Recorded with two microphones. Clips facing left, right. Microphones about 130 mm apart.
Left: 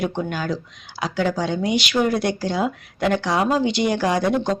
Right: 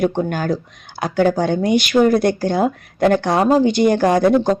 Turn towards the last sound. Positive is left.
turn(degrees=-50)  # may be behind; listen again after turning